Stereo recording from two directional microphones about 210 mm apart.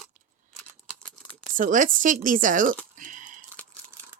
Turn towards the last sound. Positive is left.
turn(degrees=-40)  # may be behind; listen again after turning